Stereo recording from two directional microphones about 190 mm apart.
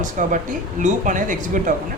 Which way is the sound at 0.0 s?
40° right (ahead or behind).